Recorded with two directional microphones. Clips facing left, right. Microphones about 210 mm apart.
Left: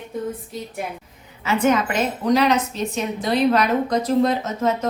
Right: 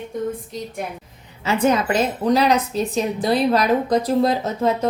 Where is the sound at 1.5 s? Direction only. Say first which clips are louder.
Right 1 dB; 35° right (ahead or behind).